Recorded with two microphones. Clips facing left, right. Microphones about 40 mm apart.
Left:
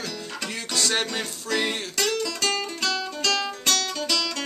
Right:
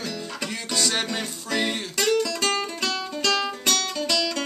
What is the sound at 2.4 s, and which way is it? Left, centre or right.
Music, centre.